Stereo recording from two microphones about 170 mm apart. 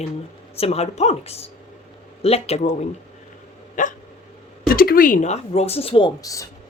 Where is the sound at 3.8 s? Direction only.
50° left (ahead or behind); by 6.5 s 20° left (ahead or behind).